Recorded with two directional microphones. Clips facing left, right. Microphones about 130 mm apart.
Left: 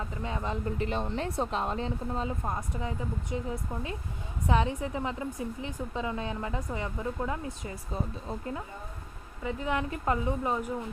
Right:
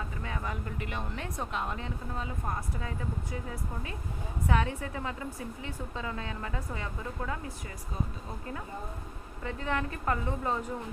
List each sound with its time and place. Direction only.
0.2 s speech: 25° left (ahead or behind)
9.4 s speech: 15° left (ahead or behind)